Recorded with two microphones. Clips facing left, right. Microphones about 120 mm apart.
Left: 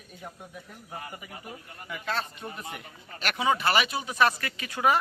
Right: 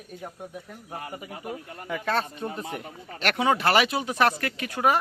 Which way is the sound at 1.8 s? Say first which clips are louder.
Right 5 dB; 55° right (ahead or behind).